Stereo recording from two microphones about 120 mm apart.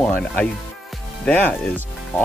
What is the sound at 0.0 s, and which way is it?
Speech, 15° left (ahead or behind).